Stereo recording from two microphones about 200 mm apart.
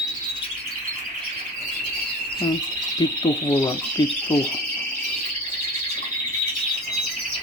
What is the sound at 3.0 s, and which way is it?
Speech, 20° left (ahead or behind).